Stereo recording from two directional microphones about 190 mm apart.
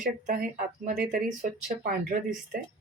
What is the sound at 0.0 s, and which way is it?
Speech, 45° right (ahead or behind).